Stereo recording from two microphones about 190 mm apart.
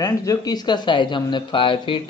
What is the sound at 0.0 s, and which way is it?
Speech, 15° left (ahead or behind).